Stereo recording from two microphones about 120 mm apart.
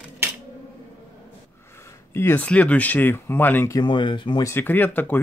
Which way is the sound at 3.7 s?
40° left (ahead or behind).